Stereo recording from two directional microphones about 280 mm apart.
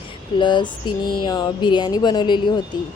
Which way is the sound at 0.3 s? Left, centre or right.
Centre.